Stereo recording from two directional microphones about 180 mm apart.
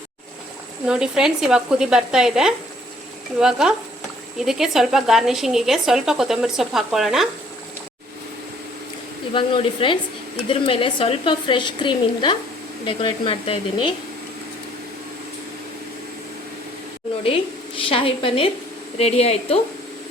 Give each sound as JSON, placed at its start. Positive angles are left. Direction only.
{"t": 0.9, "sound": "a woman's voice", "side_deg": -5}
{"t": 9.3, "sound": "a woman's voice", "side_deg": 30}
{"t": 17.7, "sound": "a woman's voice", "side_deg": 30}